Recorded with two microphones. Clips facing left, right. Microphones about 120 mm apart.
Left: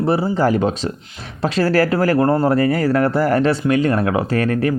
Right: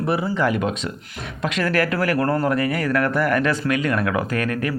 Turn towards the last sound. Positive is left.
turn(degrees=30)  # may be behind; listen again after turning